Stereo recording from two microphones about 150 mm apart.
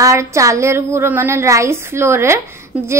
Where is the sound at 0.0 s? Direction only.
20° right (ahead or behind).